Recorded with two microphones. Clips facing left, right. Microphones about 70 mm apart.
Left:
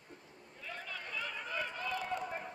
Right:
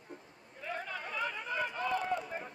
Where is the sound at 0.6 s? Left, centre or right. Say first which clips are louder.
Right 6 dB; right.